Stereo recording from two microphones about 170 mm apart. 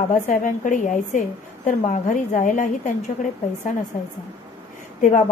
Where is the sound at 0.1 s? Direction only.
50° left (ahead or behind).